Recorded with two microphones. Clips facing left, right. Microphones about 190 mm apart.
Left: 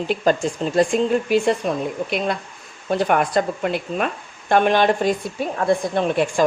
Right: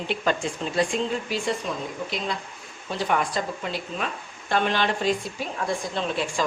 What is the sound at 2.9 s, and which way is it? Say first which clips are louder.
A woman's voice: left 7 dB; 55° left (ahead or behind).